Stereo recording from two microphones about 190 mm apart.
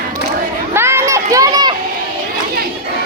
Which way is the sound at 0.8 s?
15° right (ahead or behind).